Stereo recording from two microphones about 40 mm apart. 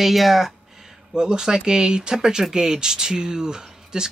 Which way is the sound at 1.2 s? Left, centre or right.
Centre.